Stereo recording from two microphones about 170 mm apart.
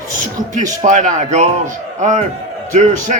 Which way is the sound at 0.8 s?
45° right (ahead or behind).